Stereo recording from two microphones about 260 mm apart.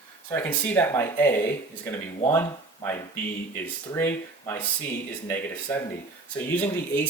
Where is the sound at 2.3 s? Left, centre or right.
Centre.